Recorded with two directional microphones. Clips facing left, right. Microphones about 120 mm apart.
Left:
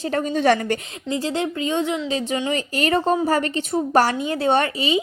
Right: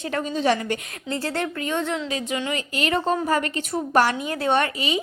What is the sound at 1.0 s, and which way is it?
Speech, 15° left (ahead or behind).